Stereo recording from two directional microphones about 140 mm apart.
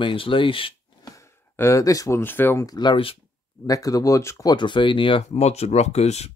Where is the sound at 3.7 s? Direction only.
25° left (ahead or behind).